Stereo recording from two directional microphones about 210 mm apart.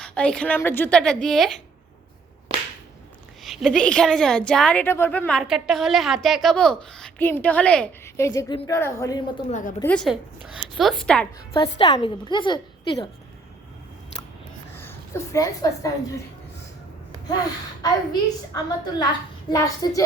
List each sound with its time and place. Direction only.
0.0 s a woman's voice: 5° left (ahead or behind)
3.4 s a woman's voice: centre (ahead or behind)
9.5 s a woman's voice: 40° left (ahead or behind)
9.8 s a woman's voice: 5° left (ahead or behind)
11.5 s a woman's voice: 20° left (ahead or behind)
14.8 s a woman's voice: 10° left (ahead or behind)
18.1 s a woman's voice: 20° left (ahead or behind)